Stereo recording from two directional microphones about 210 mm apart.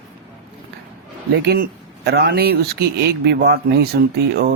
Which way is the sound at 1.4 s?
50° right (ahead or behind).